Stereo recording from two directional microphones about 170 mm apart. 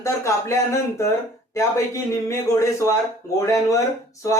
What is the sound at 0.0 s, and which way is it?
Speech, 15° left (ahead or behind).